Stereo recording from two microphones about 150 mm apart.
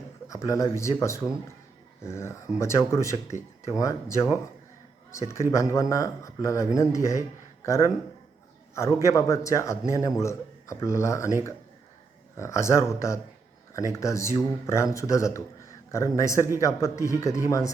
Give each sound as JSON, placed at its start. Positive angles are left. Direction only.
{"t": 0.3, "sound": "a man's voice", "side_deg": 20}
{"t": 5.3, "sound": "a man's voice", "side_deg": 20}
{"t": 9.0, "sound": "a man's voice", "side_deg": 20}
{"t": 12.4, "sound": "a man's voice", "side_deg": 20}